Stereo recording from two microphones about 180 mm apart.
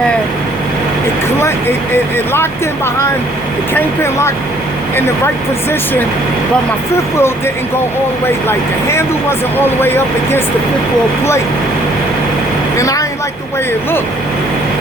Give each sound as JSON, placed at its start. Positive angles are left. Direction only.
{"t": 2.1, "sound": "speech", "side_deg": 15}
{"t": 6.9, "sound": "speech", "side_deg": 15}
{"t": 12.7, "sound": "speech", "side_deg": 20}